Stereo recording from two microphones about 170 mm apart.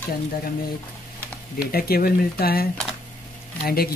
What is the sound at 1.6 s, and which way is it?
Speech, 60° left (ahead or behind).